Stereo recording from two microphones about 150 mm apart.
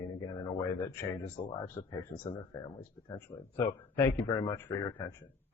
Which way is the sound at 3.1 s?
25° left (ahead or behind).